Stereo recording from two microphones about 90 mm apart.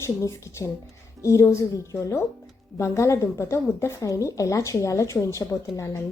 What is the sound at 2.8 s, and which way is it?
Speech, 35° left (ahead or behind).